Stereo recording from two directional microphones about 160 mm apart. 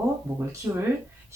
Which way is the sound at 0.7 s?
15° right (ahead or behind).